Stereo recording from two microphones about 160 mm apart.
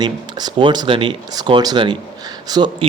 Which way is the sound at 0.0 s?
25° right (ahead or behind).